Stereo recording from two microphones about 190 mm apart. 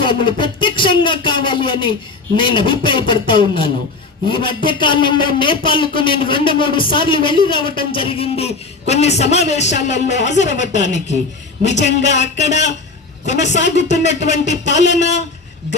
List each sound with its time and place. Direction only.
0.0 s a man's voice: 25° left (ahead or behind)